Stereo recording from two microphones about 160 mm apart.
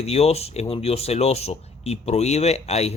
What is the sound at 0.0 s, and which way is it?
Speech, 40° left (ahead or behind).